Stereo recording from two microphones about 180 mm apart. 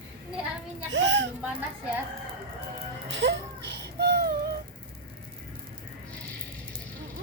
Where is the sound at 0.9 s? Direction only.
90° right.